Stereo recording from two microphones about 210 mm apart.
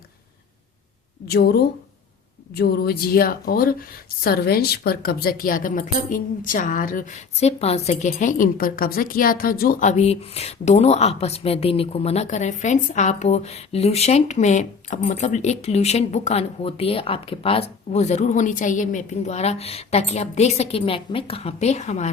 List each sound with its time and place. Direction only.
1.3 s speech: 50° left (ahead or behind); by 22.1 s 35° left (ahead or behind)